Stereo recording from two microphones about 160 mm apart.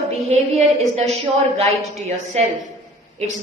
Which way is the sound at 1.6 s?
40° right (ahead or behind).